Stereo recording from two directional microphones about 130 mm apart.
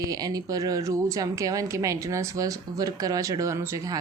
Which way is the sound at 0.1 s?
30° right (ahead or behind).